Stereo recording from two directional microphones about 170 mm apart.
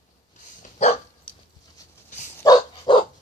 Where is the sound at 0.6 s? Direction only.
40° left (ahead or behind).